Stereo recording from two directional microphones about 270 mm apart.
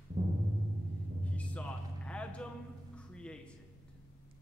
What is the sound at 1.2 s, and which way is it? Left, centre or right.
Music, centre.